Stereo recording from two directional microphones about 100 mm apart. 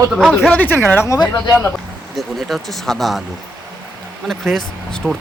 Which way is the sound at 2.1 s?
Centre (ahead or behind).